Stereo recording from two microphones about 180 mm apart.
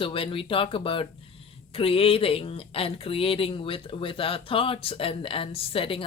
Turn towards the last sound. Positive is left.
turn(degrees=30)  # may be behind; listen again after turning